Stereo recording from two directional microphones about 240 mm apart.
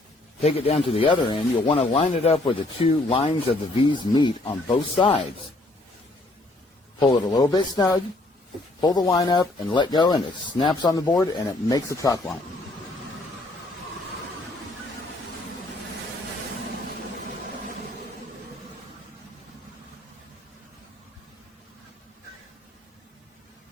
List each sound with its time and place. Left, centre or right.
0.4 s speech: left
7.1 s speech: centre